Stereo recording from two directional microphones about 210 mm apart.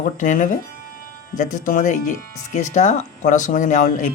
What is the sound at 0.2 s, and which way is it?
Speech, 35° left (ahead or behind).